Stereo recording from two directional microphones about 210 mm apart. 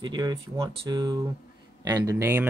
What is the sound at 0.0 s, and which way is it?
Speech, 20° right (ahead or behind).